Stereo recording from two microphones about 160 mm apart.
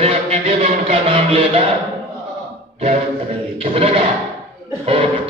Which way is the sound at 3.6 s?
35° right (ahead or behind).